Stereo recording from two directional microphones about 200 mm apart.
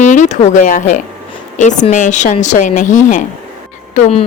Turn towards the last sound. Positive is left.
turn(degrees=30)  # may be behind; listen again after turning